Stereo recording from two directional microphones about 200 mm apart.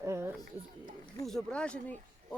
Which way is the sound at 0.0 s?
15° right (ahead or behind).